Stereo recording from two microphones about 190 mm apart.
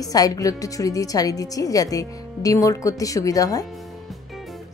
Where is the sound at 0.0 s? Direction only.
20° left (ahead or behind).